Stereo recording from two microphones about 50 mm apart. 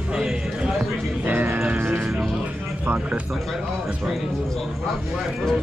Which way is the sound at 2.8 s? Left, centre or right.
Right.